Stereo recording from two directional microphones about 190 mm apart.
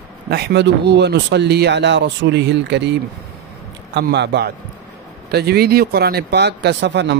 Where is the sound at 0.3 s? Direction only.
60° right (ahead or behind).